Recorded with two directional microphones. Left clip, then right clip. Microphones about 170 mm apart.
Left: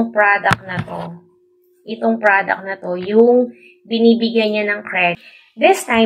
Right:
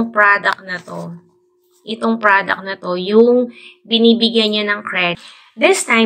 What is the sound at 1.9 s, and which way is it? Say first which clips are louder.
A woman's voice: right 1 dB; 35° right (ahead or behind).